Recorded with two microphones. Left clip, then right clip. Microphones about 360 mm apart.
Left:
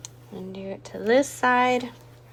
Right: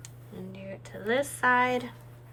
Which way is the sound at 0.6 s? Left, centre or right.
Centre.